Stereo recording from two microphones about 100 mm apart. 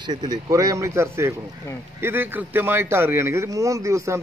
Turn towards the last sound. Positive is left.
turn(degrees=-30)  # may be behind; listen again after turning